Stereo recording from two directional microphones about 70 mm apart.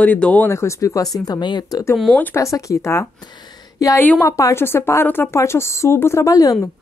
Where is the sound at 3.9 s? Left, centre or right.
Left.